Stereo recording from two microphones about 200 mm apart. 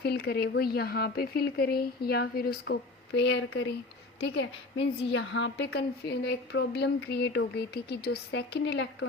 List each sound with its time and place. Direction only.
0.0 s a woman's voice: 55° left (ahead or behind)